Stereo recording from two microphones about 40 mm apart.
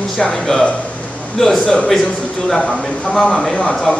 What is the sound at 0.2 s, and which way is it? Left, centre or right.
Speech, centre.